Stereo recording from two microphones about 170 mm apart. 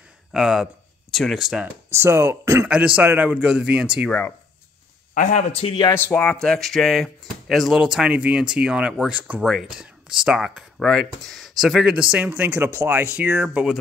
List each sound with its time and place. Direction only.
0.3 s speech: 5° right (ahead or behind)
1.9 s speech: 15° right (ahead or behind)
5.1 s speech: 50° left (ahead or behind); by 5.9 s 30° left (ahead or behind)
5.9 s speech: 10° left (ahead or behind); by 13.7 s 5° right (ahead or behind)